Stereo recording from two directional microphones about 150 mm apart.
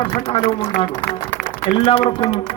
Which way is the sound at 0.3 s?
40° left (ahead or behind).